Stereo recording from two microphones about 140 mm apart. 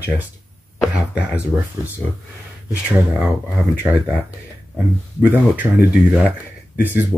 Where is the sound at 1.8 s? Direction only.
20° right (ahead or behind).